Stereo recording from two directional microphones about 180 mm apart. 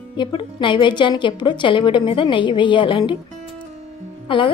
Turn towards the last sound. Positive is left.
turn(degrees=30)  # may be behind; listen again after turning